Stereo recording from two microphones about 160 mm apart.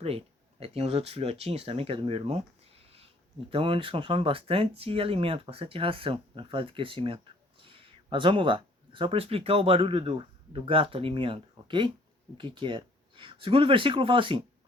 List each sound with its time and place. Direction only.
0.0 s speech: 40° right (ahead or behind)